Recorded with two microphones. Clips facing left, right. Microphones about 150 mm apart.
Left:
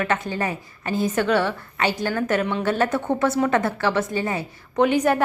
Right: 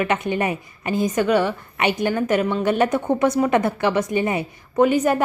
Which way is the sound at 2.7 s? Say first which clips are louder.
Right 3 dB; 15° right (ahead or behind).